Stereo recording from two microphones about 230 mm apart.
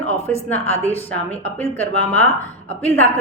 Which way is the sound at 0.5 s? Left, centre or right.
Left.